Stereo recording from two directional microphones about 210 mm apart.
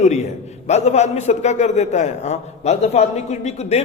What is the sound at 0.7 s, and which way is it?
A man's voice, 30° left (ahead or behind).